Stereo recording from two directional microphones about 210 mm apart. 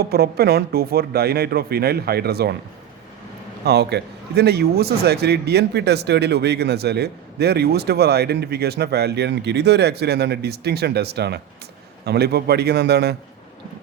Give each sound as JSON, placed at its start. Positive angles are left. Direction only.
{"t": 0.0, "sound": "a man's voice", "side_deg": -50}
{"t": 3.6, "sound": "a man's voice", "side_deg": -50}